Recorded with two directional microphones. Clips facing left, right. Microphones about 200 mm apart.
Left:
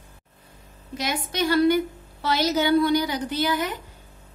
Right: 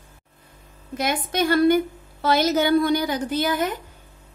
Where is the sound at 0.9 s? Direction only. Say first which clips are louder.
Right 4 dB; 50° right (ahead or behind).